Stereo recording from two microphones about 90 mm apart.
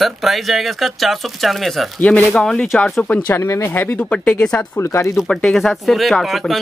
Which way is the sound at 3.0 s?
20° left (ahead or behind).